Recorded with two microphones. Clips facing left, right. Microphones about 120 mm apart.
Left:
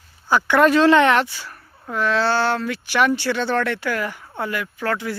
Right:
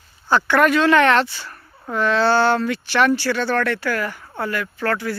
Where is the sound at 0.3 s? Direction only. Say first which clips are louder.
Left 1 dB; 15° left (ahead or behind).